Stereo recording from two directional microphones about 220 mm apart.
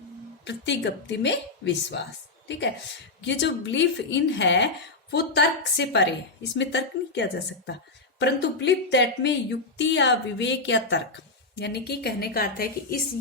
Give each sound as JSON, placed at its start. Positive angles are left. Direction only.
{"t": 0.4, "sound": "a woman's voice", "side_deg": 55}